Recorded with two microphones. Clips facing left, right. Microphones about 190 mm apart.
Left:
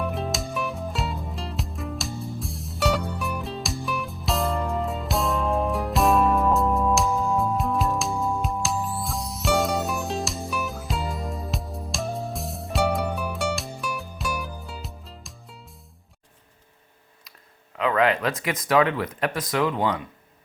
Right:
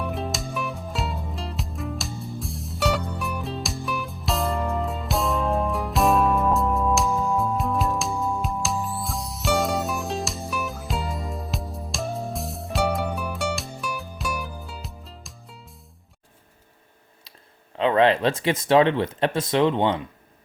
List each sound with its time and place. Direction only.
0.0 s music: centre (ahead or behind)
17.7 s speech: 30° right (ahead or behind)